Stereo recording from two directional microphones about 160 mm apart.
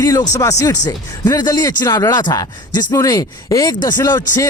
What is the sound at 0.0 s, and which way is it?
Speech, 20° left (ahead or behind).